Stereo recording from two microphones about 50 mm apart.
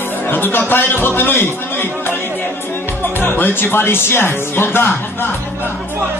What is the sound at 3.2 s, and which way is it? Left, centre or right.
Speech, left.